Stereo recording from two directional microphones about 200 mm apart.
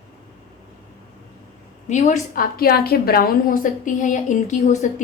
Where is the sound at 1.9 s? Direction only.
35° left (ahead or behind).